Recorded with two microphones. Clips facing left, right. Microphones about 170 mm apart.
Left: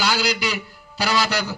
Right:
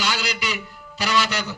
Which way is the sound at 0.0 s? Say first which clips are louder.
Left 4 dB; 35° left (ahead or behind).